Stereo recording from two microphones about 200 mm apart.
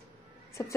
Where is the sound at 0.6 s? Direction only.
15° left (ahead or behind).